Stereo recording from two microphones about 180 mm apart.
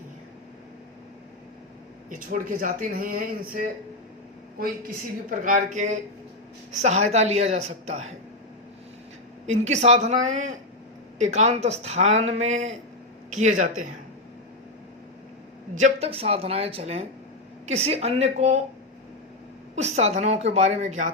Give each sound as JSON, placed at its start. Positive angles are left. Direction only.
{"t": 2.0, "sound": "speech", "side_deg": -50}
{"t": 5.4, "sound": "speech", "side_deg": -45}
{"t": 9.5, "sound": "speech", "side_deg": -40}
{"t": 15.7, "sound": "speech", "side_deg": -40}
{"t": 19.7, "sound": "speech", "side_deg": -35}